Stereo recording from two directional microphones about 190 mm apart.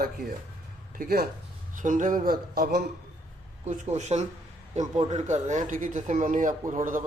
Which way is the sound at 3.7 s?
40° right (ahead or behind).